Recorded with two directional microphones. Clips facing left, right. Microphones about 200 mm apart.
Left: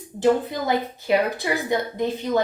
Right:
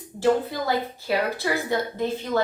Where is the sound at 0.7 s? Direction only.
20° left (ahead or behind).